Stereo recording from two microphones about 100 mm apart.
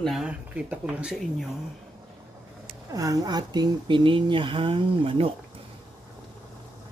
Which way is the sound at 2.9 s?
35° right (ahead or behind).